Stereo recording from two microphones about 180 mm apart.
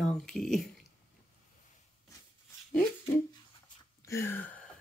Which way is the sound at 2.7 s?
10° left (ahead or behind).